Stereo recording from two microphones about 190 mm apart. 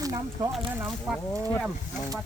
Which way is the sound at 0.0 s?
20° right (ahead or behind).